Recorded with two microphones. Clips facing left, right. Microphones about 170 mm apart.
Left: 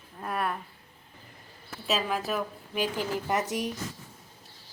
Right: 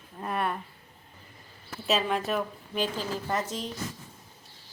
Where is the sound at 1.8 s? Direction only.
Centre (ahead or behind).